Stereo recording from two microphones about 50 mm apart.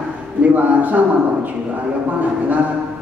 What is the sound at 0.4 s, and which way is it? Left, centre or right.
A woman's voice, right.